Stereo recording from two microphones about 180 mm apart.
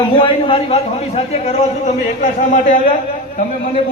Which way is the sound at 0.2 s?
30° left (ahead or behind).